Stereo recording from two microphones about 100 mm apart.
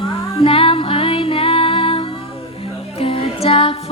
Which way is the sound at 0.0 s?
75° left (ahead or behind).